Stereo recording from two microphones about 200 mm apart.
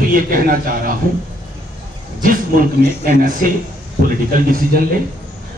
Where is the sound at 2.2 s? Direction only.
45° right (ahead or behind).